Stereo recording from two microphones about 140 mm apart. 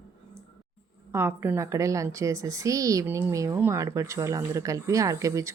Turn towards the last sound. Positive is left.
turn(degrees=-20)  # may be behind; listen again after turning